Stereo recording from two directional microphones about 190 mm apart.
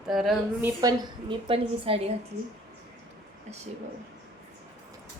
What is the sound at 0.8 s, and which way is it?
A woman's voice, 20° right (ahead or behind).